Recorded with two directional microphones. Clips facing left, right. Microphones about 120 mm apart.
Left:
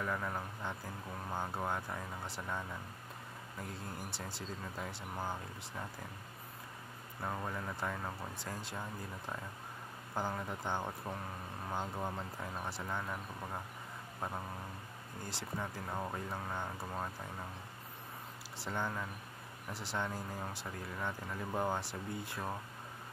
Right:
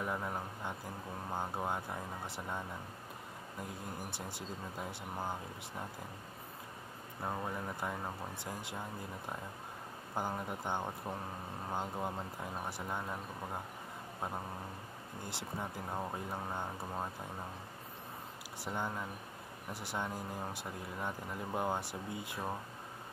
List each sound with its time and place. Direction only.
0.0 s speech: 20° right (ahead or behind)
4.3 s speech: 20° right (ahead or behind)
7.2 s speech: 15° right (ahead or behind)
10.1 s speech: 15° right (ahead or behind)
15.2 s speech: 20° right (ahead or behind)
18.6 s speech: 15° right (ahead or behind)